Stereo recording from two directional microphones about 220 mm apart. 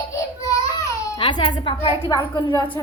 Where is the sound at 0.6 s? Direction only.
20° left (ahead or behind).